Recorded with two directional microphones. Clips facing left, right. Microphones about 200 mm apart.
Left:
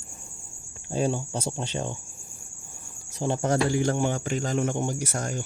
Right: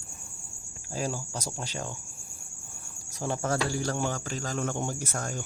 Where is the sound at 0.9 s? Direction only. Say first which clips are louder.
Left 7 dB; 25° left (ahead or behind).